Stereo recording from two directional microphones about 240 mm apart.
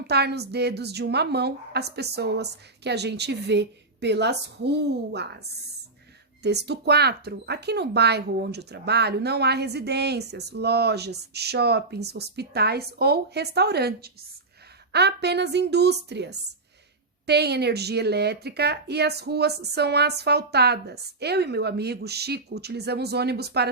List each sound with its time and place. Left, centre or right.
0.1 s speech: right